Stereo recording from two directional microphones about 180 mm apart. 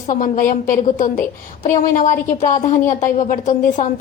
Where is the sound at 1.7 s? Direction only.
45° left (ahead or behind).